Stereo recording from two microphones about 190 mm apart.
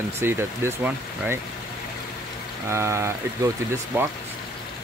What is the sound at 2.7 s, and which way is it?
Speech, 15° right (ahead or behind).